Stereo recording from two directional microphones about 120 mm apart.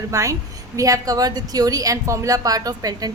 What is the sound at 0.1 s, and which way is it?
A woman's voice, 25° right (ahead or behind).